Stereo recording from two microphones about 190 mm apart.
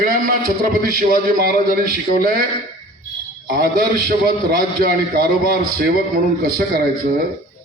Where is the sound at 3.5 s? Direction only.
50° right (ahead or behind).